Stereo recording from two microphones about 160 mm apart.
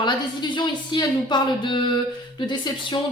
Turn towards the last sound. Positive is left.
turn(degrees=30)  # may be behind; listen again after turning